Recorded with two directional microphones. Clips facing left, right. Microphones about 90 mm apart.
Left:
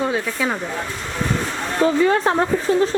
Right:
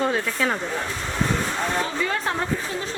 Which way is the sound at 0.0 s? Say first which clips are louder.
Left 1 dB; 10° left (ahead or behind).